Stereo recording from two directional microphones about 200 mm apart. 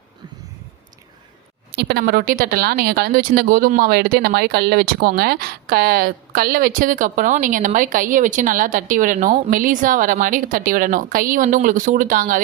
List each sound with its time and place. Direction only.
1.7 s speech: 55° right (ahead or behind)